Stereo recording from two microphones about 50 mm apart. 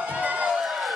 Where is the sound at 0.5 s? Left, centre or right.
Centre.